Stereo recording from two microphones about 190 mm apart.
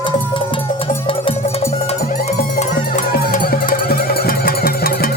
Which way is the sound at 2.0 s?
45° left (ahead or behind).